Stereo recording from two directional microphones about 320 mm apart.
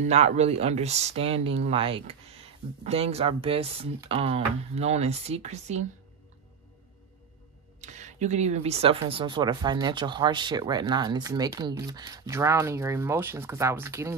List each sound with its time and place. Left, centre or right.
0.0 s speech: centre
7.8 s speech: right